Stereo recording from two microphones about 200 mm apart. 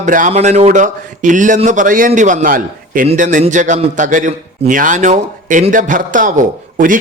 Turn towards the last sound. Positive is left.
turn(degrees=-40)  # may be behind; listen again after turning